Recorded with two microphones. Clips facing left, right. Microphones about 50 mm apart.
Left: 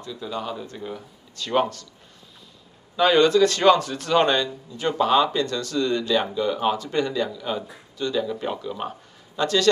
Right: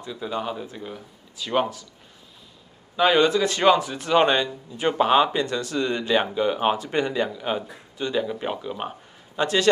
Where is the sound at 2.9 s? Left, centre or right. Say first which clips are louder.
Left 1 dB; centre.